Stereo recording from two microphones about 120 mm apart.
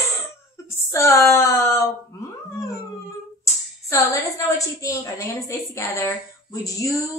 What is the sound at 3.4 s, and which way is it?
A woman's voice, 25° left (ahead or behind).